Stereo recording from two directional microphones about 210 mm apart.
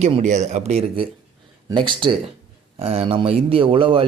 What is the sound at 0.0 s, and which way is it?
Speech, 35° right (ahead or behind).